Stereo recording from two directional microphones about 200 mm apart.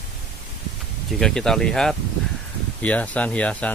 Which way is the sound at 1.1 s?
5° left (ahead or behind).